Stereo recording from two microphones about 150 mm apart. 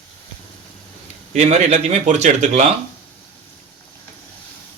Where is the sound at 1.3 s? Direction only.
50° right (ahead or behind).